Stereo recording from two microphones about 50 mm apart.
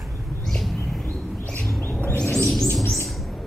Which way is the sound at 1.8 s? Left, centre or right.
Left.